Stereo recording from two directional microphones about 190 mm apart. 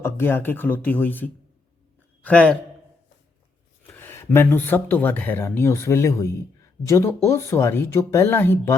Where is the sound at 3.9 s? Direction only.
15° left (ahead or behind).